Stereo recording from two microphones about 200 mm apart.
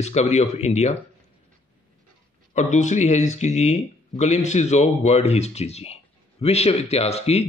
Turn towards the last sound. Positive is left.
turn(degrees=30)  # may be behind; listen again after turning